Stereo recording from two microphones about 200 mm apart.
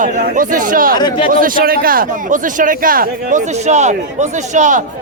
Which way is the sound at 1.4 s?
45° right (ahead or behind).